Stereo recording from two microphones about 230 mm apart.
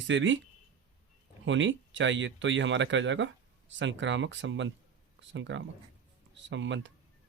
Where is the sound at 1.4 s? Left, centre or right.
Right.